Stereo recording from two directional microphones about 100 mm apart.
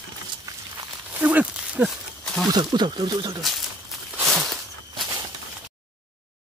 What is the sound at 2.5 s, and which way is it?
Speech, 45° right (ahead or behind).